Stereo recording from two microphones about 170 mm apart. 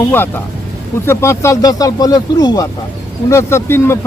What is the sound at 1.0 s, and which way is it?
Speech, 15° left (ahead or behind).